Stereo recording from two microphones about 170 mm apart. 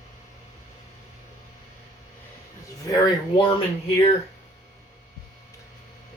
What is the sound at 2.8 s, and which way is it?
Speech, 25° left (ahead or behind).